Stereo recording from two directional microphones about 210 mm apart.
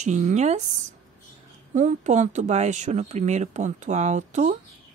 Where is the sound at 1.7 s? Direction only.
35° right (ahead or behind).